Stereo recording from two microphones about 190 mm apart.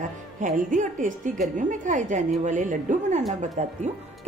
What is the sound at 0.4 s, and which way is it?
Speech, 40° right (ahead or behind).